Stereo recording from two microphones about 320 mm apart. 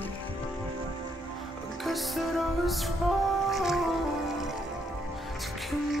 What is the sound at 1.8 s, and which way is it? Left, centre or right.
Music, centre.